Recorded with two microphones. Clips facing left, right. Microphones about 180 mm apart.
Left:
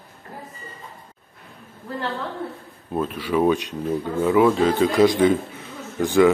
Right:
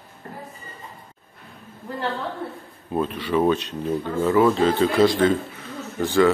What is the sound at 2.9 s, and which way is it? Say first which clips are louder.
Speech: even; 5° left (ahead or behind).